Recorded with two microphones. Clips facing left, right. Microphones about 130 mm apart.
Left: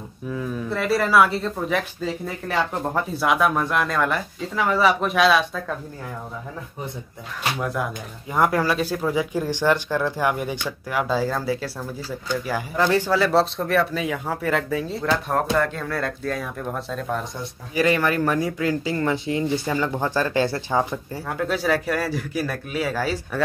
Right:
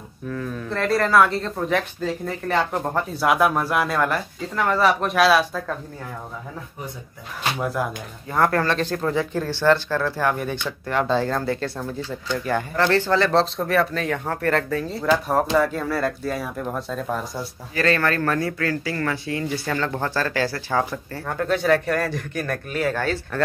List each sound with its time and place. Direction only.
0.3 s speech: 5° left (ahead or behind)
7.6 s speech: centre (ahead or behind)
8.3 s speech: 10° left (ahead or behind); by 17.5 s 5° right (ahead or behind)
17.7 s speech: 15° left (ahead or behind)
21.3 s speech: 5° left (ahead or behind)